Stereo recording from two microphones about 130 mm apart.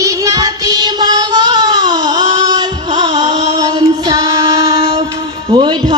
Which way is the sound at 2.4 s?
30° right (ahead or behind).